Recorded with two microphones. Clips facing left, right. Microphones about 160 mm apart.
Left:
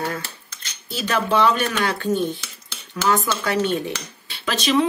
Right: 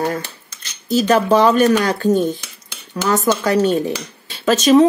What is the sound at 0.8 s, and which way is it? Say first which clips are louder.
Speech: right 9 dB; 40° right (ahead or behind).